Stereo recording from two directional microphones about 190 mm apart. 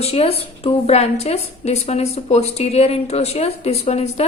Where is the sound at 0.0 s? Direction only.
30° left (ahead or behind).